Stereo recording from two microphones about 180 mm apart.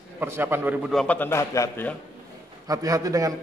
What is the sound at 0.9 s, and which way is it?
A man's voice, 5° left (ahead or behind).